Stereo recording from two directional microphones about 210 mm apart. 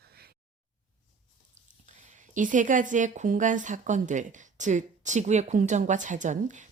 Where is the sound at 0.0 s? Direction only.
50° right (ahead or behind).